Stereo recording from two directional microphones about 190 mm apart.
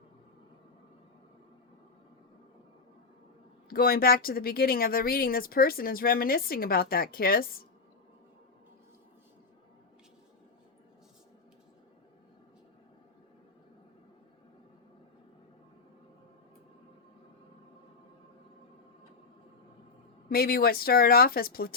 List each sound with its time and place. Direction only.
3.7 s speech: 50° left (ahead or behind)
20.3 s speech: 50° left (ahead or behind)